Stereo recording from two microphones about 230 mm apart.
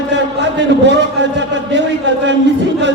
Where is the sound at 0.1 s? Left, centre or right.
Right.